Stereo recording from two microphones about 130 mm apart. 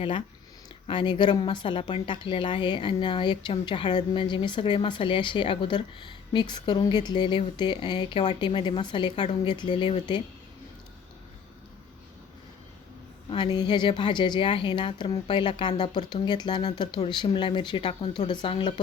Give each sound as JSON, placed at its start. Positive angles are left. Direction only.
{"t": 0.0, "sound": "a woman's voice", "side_deg": 40}
{"t": 13.3, "sound": "a woman's voice", "side_deg": 35}